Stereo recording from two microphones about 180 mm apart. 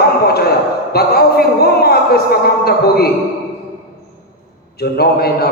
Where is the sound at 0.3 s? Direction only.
60° left (ahead or behind).